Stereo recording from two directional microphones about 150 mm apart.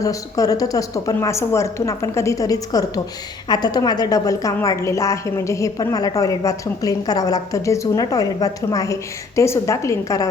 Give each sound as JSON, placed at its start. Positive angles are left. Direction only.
{"t": 0.0, "sound": "a woman's voice", "side_deg": 25}